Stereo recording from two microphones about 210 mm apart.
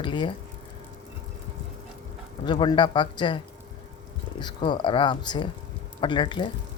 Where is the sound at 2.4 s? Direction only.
20° left (ahead or behind).